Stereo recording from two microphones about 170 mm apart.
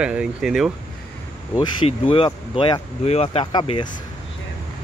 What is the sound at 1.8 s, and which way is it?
Speech, 30° left (ahead or behind).